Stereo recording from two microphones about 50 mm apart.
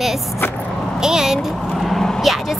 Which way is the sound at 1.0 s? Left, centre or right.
Centre.